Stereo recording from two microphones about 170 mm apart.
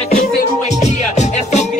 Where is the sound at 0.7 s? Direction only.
40° left (ahead or behind).